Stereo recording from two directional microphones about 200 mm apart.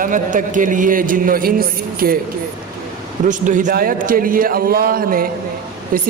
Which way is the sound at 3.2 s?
40° right (ahead or behind).